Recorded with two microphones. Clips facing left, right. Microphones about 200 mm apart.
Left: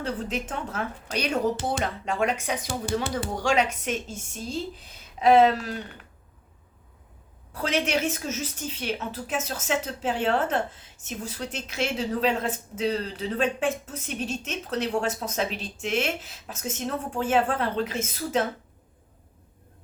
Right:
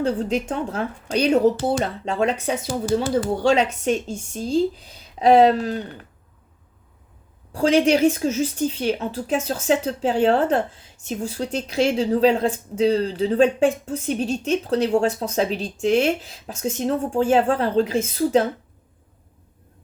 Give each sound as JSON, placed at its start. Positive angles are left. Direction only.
{"t": 0.0, "sound": "a woman's voice", "side_deg": -30}
{"t": 3.5, "sound": "a woman's voice", "side_deg": -30}
{"t": 7.5, "sound": "a woman's voice", "side_deg": -30}